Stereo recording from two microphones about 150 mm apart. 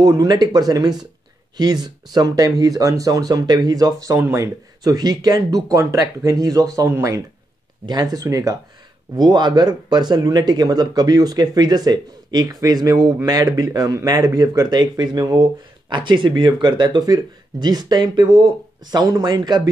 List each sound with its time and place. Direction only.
0.0 s speech: 25° right (ahead or behind)